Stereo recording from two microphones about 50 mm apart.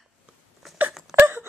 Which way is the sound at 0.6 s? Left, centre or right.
Centre.